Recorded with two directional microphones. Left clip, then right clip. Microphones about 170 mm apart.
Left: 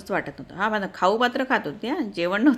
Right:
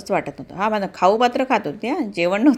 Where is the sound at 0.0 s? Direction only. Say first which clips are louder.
Right 5 dB; 15° right (ahead or behind).